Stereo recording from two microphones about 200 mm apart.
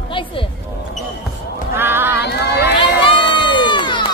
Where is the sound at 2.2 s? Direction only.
55° left (ahead or behind).